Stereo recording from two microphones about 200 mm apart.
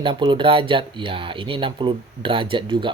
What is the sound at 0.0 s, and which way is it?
Speech, 25° right (ahead or behind).